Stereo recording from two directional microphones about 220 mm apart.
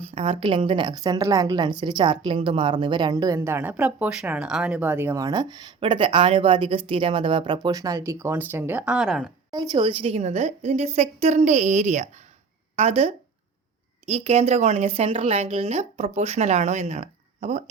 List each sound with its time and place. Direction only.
0.0 s a woman's voice: 25° right (ahead or behind); by 9.3 s centre (ahead or behind)
9.5 s a woman's voice: 15° right (ahead or behind)